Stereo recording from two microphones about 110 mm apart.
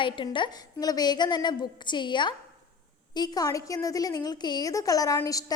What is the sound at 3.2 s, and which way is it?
A woman's voice, 35° left (ahead or behind).